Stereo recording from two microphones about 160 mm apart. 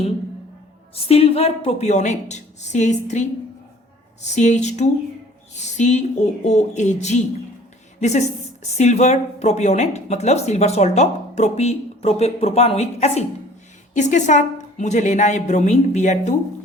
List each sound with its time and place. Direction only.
0.9 s speech: 40° left (ahead or behind)